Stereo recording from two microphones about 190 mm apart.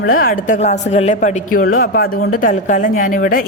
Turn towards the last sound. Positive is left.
turn(degrees=50)  # may be behind; listen again after turning